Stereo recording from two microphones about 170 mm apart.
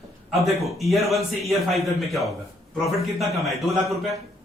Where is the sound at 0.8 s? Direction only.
Centre (ahead or behind).